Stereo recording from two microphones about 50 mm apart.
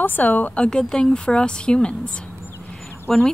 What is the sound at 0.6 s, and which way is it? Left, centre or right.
A woman's voice, centre.